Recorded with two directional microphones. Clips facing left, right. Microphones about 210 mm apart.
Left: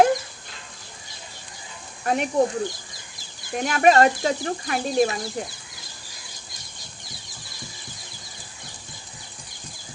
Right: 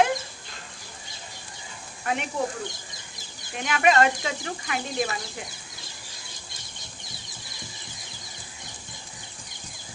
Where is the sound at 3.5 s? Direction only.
40° left (ahead or behind).